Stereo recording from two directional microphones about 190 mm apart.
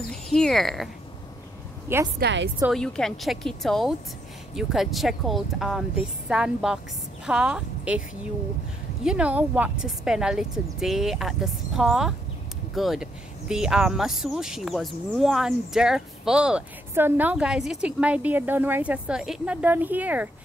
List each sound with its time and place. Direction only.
0.1 s speech: centre (ahead or behind)
2.1 s a woman's voice: 65° right (ahead or behind)
2.6 s a woman's voice: centre (ahead or behind)
9.0 s speech: 5° right (ahead or behind)